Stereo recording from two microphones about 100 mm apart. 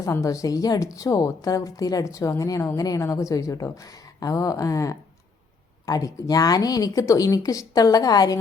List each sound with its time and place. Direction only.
0.0 s a woman's voice: 35° left (ahead or behind)